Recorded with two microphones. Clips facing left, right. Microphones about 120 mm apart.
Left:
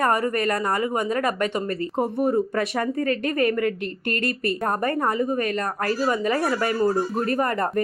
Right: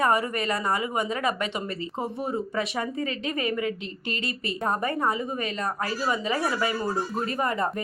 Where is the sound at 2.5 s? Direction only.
55° left (ahead or behind).